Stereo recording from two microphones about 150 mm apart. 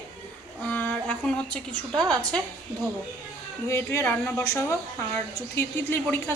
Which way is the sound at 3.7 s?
15° left (ahead or behind).